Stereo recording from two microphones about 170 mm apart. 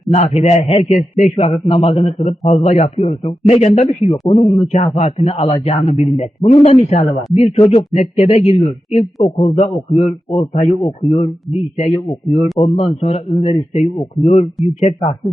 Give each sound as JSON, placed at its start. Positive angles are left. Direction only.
{"t": 0.1, "sound": "a man's voice", "side_deg": 40}
{"t": 4.4, "sound": "a man's voice", "side_deg": -5}
{"t": 4.7, "sound": "a man's voice", "side_deg": 40}